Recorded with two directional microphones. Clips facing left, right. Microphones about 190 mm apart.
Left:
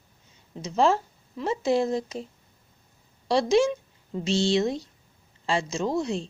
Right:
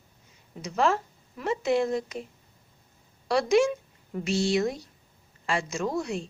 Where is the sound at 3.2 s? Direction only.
30° left (ahead or behind).